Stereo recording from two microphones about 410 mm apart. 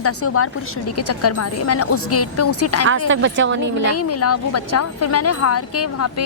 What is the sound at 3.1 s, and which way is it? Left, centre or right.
Speech, right.